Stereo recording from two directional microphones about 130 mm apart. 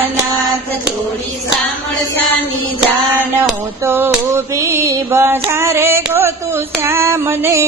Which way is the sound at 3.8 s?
20° right (ahead or behind).